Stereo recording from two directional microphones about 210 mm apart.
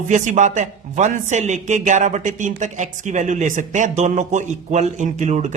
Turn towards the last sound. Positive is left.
turn(degrees=-35)  # may be behind; listen again after turning